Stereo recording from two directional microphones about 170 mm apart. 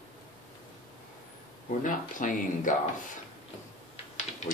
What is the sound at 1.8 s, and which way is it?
Speech, 50° left (ahead or behind).